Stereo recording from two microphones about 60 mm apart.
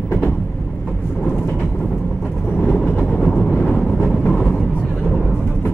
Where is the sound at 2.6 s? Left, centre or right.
Left.